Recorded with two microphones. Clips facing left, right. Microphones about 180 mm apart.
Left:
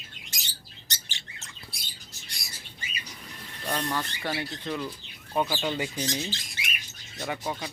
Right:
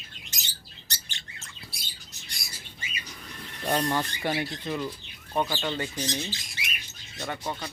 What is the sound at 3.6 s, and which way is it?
Speech, 25° right (ahead or behind).